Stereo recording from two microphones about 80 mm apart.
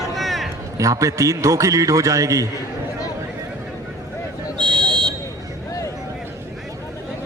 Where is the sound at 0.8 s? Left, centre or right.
Right.